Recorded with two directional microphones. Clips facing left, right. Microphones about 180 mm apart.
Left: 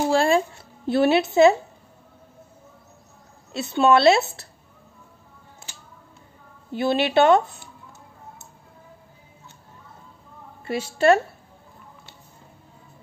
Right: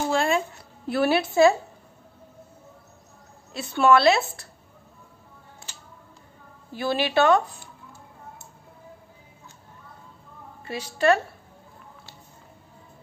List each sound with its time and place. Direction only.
0.1 s a sound: 35° left (ahead or behind)
0.8 s speech: 25° left (ahead or behind)
3.5 s speech: 20° left (ahead or behind)
6.7 s speech: 25° left (ahead or behind)
10.6 s a woman's voice: 30° left (ahead or behind)